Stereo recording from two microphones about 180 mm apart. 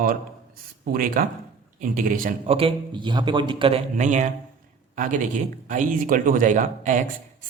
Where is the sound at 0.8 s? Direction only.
50° right (ahead or behind).